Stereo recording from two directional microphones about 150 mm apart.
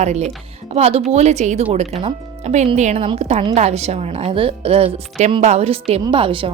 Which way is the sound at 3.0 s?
40° right (ahead or behind).